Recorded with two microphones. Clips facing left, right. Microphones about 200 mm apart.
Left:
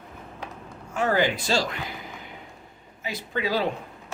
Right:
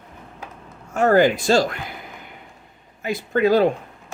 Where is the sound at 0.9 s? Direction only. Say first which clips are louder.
Right 8 dB; 50° right (ahead or behind).